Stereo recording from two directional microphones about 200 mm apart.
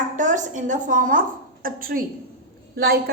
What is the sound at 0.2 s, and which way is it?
A woman's voice, 40° right (ahead or behind).